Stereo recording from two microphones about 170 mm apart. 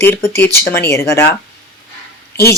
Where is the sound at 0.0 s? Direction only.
15° left (ahead or behind).